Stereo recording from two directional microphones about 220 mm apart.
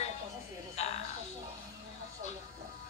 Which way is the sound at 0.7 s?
30° left (ahead or behind).